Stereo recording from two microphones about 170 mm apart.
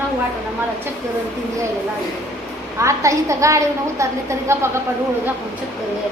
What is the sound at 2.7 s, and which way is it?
A woman's voice, 15° right (ahead or behind).